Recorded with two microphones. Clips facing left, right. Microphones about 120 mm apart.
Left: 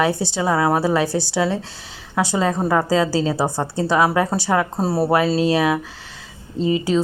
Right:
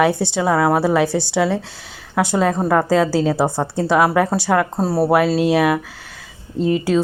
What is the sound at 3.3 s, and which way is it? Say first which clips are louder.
Speech: right 3 dB; 15° right (ahead or behind).